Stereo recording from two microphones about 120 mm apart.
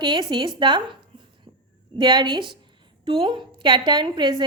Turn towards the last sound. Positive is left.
turn(degrees=-40)  # may be behind; listen again after turning